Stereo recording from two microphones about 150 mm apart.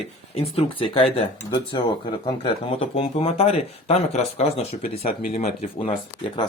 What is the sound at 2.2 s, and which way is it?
Speech, 35° left (ahead or behind).